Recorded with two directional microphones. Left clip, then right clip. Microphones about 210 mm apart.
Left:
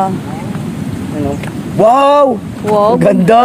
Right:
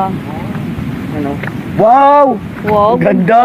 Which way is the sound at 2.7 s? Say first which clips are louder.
Even; 20° left (ahead or behind).